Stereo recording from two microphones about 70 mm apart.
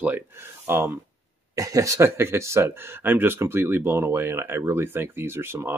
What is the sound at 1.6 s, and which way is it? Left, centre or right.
Speech, right.